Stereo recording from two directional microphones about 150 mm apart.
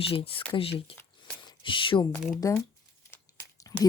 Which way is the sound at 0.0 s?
35° left (ahead or behind).